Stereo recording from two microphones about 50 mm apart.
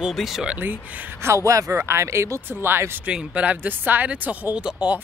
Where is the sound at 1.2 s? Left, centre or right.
Right.